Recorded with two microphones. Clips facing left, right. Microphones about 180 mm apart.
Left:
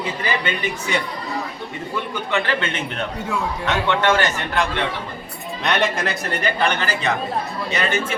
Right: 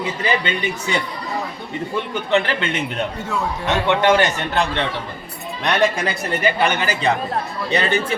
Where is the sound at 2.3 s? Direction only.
20° right (ahead or behind).